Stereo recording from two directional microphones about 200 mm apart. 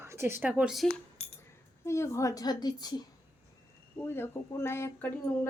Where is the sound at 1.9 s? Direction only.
15° left (ahead or behind).